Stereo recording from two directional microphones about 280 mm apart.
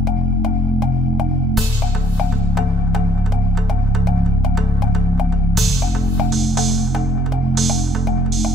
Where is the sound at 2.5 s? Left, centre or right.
Centre.